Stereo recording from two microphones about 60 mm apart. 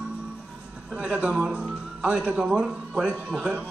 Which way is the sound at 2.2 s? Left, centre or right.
Right.